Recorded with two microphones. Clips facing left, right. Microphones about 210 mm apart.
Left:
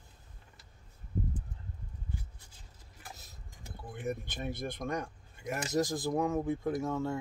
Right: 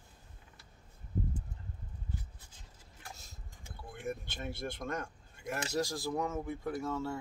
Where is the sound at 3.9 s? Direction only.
15° left (ahead or behind).